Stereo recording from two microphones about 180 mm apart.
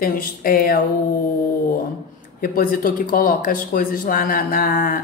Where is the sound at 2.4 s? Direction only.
50° left (ahead or behind).